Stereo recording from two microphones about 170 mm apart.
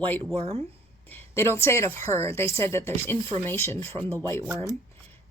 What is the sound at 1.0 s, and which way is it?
A woman's voice, 15° left (ahead or behind).